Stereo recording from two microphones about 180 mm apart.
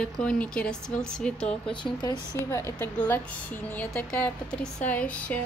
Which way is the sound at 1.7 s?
25° left (ahead or behind).